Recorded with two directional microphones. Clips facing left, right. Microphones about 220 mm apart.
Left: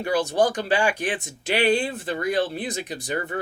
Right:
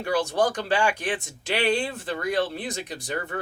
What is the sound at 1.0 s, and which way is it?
Speech, 15° left (ahead or behind).